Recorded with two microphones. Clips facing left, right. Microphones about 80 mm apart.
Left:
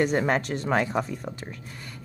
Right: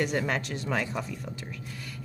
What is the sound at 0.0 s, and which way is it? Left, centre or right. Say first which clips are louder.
Speech: left 5 dB; left.